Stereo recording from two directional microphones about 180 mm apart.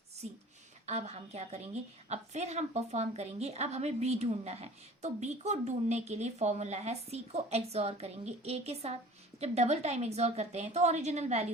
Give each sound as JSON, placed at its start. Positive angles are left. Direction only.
{"t": 0.2, "sound": "a woman's voice", "side_deg": -40}